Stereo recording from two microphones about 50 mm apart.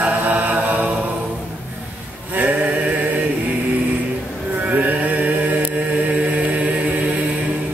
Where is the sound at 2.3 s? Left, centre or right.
Right.